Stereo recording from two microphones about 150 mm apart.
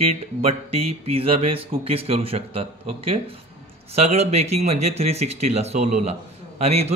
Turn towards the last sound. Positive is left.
turn(degrees=-45)  # may be behind; listen again after turning